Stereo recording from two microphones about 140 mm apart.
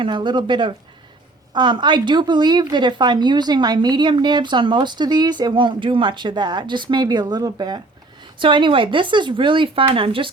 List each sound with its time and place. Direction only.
0.0 s a woman's voice: 35° right (ahead or behind)